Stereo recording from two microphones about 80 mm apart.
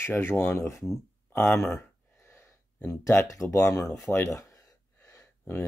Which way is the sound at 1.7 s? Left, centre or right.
Left.